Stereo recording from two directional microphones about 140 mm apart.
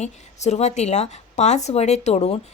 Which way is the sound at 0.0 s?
55° left (ahead or behind).